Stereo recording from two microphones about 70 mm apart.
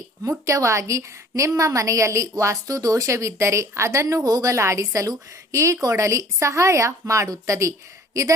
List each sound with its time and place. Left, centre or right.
0.3 s a woman's voice: right